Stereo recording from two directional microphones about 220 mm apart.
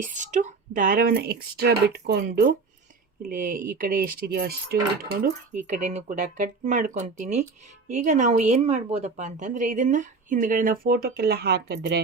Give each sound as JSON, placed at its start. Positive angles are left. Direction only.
{"t": 0.0, "sound": "a woman's voice", "side_deg": -35}